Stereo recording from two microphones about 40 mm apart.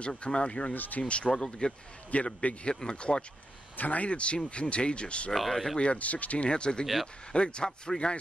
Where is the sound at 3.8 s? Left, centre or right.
Left.